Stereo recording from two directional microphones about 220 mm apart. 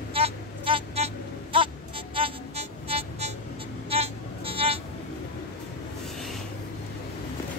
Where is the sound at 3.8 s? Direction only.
25° right (ahead or behind).